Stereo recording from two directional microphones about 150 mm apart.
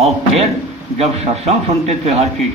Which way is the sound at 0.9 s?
45° right (ahead or behind).